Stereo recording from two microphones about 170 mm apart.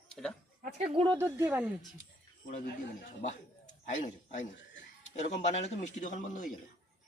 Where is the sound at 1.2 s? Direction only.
15° right (ahead or behind).